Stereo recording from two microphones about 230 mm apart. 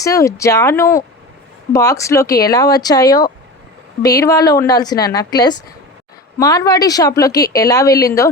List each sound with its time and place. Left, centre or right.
0.0 s a woman's voice: centre